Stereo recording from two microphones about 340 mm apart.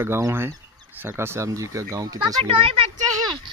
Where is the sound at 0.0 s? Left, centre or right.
Centre.